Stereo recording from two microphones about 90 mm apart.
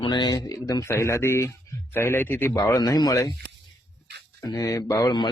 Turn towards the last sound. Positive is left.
turn(degrees=35)  # may be behind; listen again after turning